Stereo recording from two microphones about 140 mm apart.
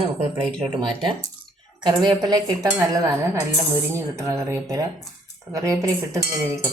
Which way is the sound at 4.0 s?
20° right (ahead or behind).